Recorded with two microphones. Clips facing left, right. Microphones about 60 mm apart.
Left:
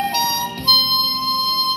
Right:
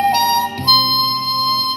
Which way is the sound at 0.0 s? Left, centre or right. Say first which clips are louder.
Right 6 dB; right.